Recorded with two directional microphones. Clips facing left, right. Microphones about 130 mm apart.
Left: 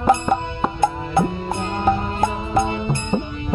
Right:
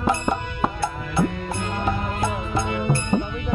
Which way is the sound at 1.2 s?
25° left (ahead or behind).